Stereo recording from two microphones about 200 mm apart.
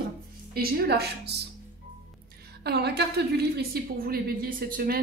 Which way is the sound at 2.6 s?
55° right (ahead or behind).